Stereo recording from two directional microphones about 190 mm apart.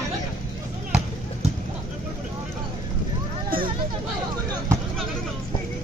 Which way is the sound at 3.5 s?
50° right (ahead or behind).